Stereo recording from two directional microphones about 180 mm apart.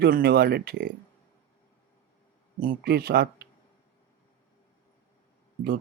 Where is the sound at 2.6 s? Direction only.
55° right (ahead or behind).